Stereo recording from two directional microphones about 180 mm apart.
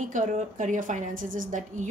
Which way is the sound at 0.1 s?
45° right (ahead or behind).